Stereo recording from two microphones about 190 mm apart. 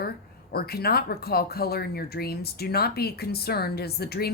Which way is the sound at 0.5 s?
55° left (ahead or behind).